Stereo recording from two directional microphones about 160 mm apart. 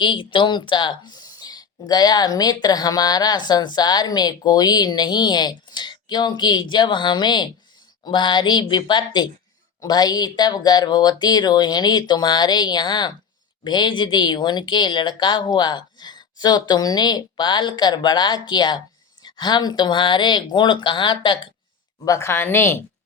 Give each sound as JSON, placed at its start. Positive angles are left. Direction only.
{"t": 0.0, "sound": "a woman's voice", "side_deg": 30}
{"t": 22.0, "sound": "speech", "side_deg": 20}